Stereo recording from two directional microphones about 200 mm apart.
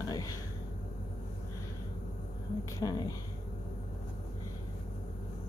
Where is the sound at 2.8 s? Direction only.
20° left (ahead or behind).